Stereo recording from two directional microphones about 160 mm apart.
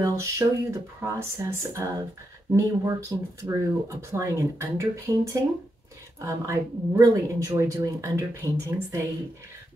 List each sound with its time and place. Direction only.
0.0 s speech: 20° right (ahead or behind)